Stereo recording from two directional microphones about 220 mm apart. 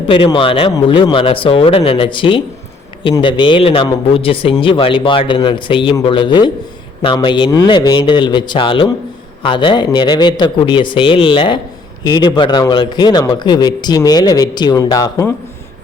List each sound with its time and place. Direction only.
0.1 s speech: 25° left (ahead or behind)